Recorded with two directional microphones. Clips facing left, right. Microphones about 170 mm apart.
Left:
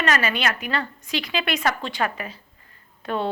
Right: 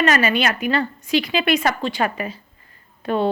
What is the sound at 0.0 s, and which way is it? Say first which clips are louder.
Speech: right 5 dB; 10° right (ahead or behind).